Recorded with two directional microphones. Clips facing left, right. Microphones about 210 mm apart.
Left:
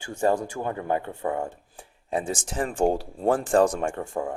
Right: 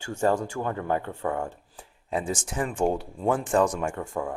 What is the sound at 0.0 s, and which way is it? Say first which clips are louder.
Speech: left 1 dB; 15° left (ahead or behind).